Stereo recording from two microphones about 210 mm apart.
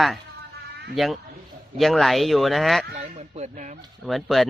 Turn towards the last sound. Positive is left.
turn(degrees=0)  # may be behind; listen again after turning